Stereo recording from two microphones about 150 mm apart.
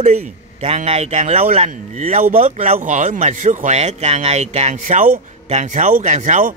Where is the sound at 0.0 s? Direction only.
45° right (ahead or behind).